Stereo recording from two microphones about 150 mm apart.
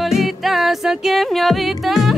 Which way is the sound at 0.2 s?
Centre (ahead or behind).